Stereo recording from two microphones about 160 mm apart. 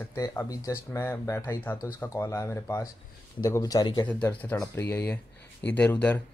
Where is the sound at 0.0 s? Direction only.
20° left (ahead or behind).